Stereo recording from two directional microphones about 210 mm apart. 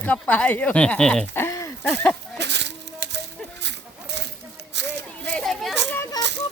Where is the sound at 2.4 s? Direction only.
55° right (ahead or behind).